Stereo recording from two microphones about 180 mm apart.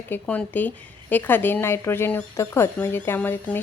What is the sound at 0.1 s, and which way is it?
A woman's voice, 10° left (ahead or behind).